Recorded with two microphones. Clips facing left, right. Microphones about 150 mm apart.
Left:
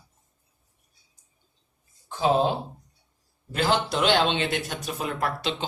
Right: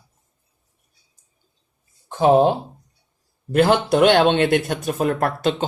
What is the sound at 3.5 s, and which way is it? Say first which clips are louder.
Speech: right 9 dB; 55° right (ahead or behind).